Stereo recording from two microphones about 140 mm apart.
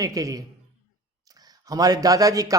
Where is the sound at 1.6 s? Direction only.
25° right (ahead or behind).